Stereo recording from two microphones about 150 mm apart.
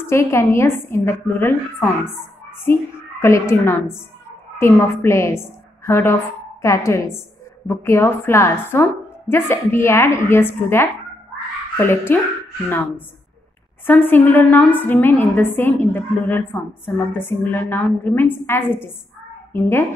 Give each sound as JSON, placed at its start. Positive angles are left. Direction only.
{"t": 0.1, "sound": "a woman's voice", "side_deg": 20}